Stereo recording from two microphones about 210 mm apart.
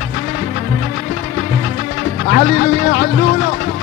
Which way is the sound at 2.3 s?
45° left (ahead or behind).